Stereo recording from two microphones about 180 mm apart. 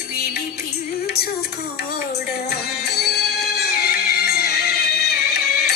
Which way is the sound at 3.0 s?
60° left (ahead or behind).